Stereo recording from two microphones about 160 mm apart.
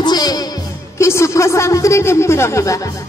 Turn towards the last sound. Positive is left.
turn(degrees=20)  # may be behind; listen again after turning